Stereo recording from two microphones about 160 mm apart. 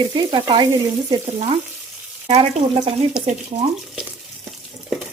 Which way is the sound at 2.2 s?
40° right (ahead or behind).